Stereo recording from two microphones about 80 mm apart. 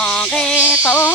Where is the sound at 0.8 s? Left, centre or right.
Left.